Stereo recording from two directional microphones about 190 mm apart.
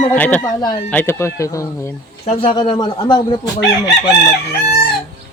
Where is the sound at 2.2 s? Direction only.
30° left (ahead or behind).